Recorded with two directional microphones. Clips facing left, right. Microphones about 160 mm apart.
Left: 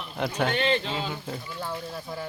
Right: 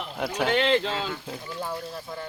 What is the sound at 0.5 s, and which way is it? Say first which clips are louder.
Speech: right 3 dB; 90° right.